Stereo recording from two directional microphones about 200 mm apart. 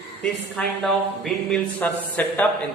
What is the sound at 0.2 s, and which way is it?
Speech, 5° left (ahead or behind).